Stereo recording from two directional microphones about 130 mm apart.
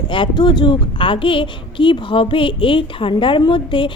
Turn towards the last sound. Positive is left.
turn(degrees=40)  # may be behind; listen again after turning